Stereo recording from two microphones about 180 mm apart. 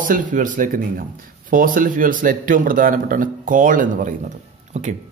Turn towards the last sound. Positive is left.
turn(degrees=-45)  # may be behind; listen again after turning